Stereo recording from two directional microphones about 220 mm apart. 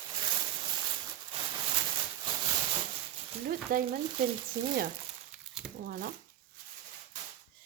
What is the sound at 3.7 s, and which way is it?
Speech, 40° right (ahead or behind).